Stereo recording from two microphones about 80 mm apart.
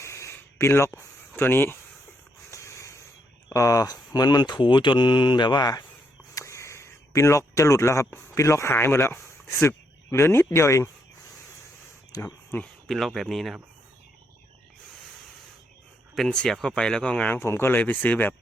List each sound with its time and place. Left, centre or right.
0.0 s a sound: left
1.4 s speech: left
2.5 s a sound: left
3.5 s speech: left
6.3 s speech: left
12.1 s a sound: left
12.9 s speech: centre
16.1 s speech: centre
17.3 s speech: left